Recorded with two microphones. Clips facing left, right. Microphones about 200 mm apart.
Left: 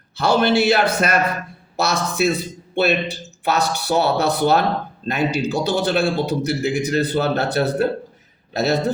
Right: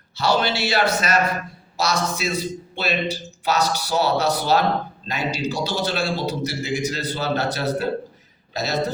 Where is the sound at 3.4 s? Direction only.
60° left (ahead or behind).